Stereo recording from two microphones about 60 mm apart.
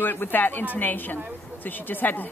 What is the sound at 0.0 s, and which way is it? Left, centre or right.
A woman's voice, left.